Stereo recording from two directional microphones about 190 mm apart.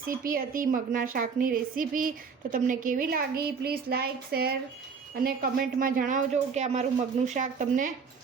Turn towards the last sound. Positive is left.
turn(degrees=-45)  # may be behind; listen again after turning